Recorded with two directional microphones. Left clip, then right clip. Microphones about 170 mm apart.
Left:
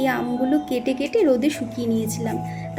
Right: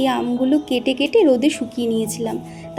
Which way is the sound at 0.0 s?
25° right (ahead or behind).